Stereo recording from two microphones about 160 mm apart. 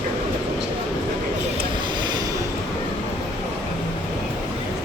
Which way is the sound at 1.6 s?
30° right (ahead or behind).